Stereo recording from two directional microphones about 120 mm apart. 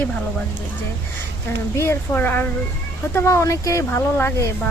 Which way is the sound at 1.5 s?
20° left (ahead or behind).